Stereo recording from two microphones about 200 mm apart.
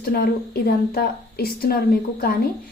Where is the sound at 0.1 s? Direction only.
50° left (ahead or behind).